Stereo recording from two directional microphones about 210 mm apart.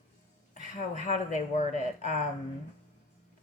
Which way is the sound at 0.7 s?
35° left (ahead or behind).